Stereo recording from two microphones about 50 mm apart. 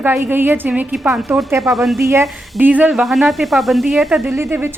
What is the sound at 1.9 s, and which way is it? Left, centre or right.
Speech, right.